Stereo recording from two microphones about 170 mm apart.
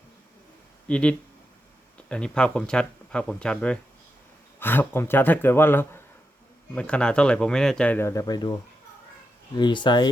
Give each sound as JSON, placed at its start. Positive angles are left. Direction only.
{"t": 0.9, "sound": "speech", "side_deg": 5}
{"t": 9.6, "sound": "speech", "side_deg": 25}